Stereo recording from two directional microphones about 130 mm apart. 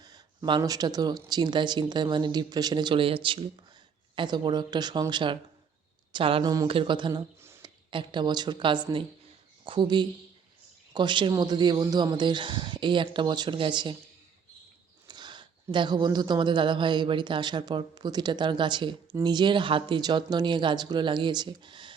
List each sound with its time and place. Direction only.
0.0 s speech: 35° right (ahead or behind)
6.4 s speech: 30° right (ahead or behind)
6.7 s speech: 40° right (ahead or behind)
7.1 s a sound: 20° right (ahead or behind)
7.6 s speech: 40° right (ahead or behind)
15.0 s speech: 35° right (ahead or behind)